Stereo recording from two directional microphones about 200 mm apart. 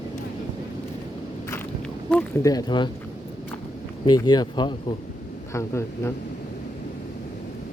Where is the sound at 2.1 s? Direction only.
15° left (ahead or behind).